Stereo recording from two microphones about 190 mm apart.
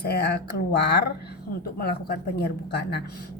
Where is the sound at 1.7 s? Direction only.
55° left (ahead or behind).